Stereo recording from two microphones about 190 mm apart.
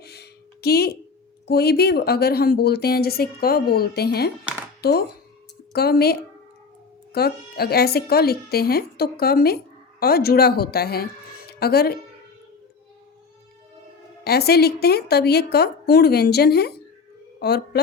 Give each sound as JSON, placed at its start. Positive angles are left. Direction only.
{"t": 0.0, "sound": "a sound", "side_deg": 60}
{"t": 1.5, "sound": "a woman's voice", "side_deg": 60}
{"t": 14.3, "sound": "a woman's voice", "side_deg": 55}